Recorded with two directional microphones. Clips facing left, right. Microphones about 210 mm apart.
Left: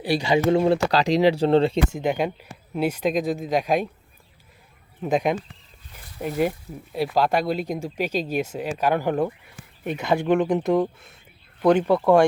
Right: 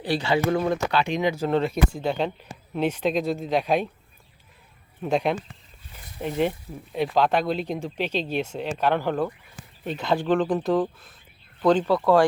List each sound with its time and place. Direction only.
0.0 s speech: 15° left (ahead or behind)
5.1 s speech: 15° left (ahead or behind)
10.6 s speech: 25° left (ahead or behind)